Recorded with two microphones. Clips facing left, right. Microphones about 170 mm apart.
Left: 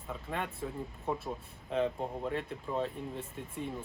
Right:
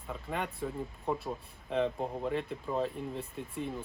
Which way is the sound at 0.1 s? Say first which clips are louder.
Right 1 dB; centre (ahead or behind).